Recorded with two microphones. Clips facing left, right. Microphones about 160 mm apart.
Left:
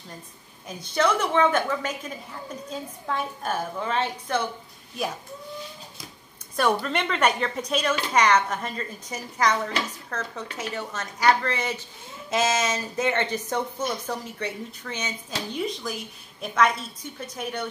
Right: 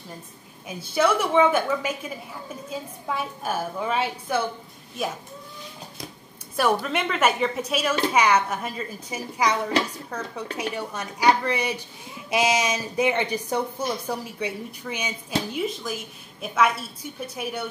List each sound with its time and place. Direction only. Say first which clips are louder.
0.7 s speech: right 2 dB; 5° right (ahead or behind)
6.5 s speech: right 1 dB; 5° right (ahead or behind)